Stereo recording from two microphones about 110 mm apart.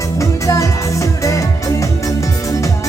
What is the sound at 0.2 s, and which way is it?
Music, 30° left (ahead or behind).